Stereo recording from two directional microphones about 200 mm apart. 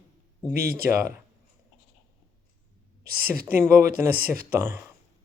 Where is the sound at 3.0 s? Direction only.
50° right (ahead or behind).